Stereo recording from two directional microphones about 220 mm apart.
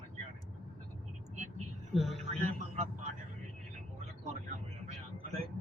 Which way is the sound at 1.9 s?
Centre (ahead or behind).